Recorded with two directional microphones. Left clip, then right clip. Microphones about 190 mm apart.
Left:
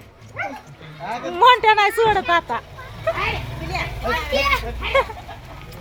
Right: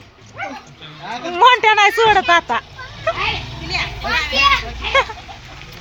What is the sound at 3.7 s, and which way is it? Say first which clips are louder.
A child's voice: right 4 dB; 65° left (ahead or behind).